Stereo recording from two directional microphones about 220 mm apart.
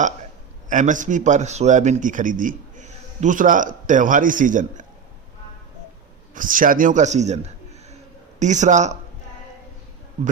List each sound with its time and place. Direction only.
0.7 s speech: 35° right (ahead or behind)
6.3 s a man's voice: 35° right (ahead or behind)